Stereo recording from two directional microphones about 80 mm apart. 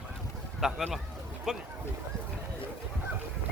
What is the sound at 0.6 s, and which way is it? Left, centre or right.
Speech, centre.